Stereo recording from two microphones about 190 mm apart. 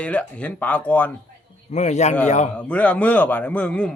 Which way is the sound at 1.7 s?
35° left (ahead or behind).